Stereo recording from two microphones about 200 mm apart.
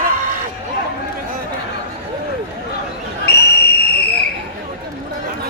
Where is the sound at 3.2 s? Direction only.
55° left (ahead or behind).